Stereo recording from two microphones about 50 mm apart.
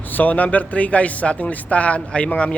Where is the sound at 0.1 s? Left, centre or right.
Left.